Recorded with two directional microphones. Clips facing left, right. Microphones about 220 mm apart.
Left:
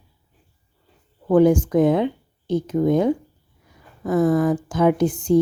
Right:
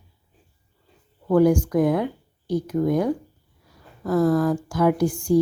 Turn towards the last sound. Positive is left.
turn(degrees=20)  # may be behind; listen again after turning